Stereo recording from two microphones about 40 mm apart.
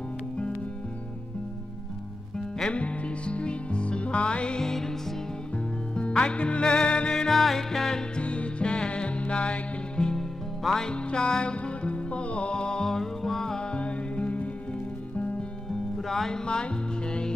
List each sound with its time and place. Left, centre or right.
2.7 s music: left
4.6 s music: centre
5.9 s music: left
7.2 s music: centre
8.2 s music: left
10.1 s music: centre
10.9 s music: left
16.0 s music: centre